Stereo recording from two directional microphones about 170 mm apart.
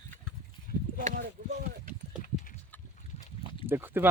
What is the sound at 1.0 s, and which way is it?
Speech, 55° right (ahead or behind).